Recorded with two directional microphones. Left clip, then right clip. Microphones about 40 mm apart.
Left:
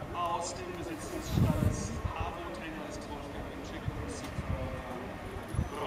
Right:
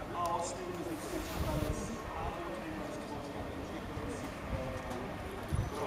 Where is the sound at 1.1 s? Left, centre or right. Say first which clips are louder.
Left 5 dB; centre.